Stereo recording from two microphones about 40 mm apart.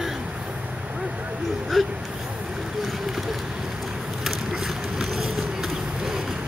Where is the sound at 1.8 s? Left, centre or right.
Centre.